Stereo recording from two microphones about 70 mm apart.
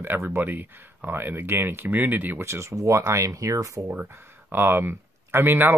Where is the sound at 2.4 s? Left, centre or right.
Right.